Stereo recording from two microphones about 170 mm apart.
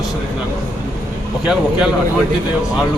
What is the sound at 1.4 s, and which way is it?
Speech, 5° right (ahead or behind).